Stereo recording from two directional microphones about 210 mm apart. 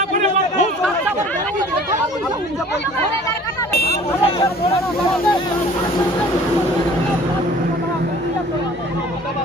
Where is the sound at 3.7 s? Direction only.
50° left (ahead or behind).